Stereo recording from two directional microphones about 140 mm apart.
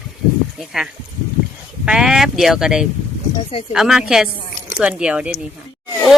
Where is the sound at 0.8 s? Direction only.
5° right (ahead or behind).